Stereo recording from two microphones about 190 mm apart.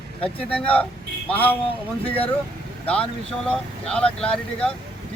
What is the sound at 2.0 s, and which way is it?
Speech, 30° left (ahead or behind).